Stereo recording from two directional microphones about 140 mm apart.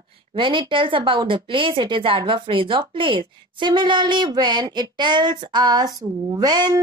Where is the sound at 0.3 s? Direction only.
35° right (ahead or behind).